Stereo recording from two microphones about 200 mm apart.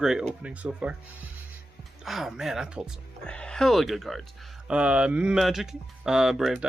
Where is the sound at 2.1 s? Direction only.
Centre (ahead or behind).